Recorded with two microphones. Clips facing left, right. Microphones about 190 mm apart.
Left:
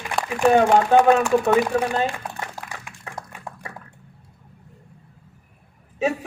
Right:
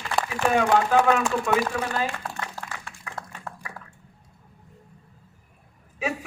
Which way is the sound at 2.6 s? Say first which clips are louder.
Left 1 dB; 15° left (ahead or behind).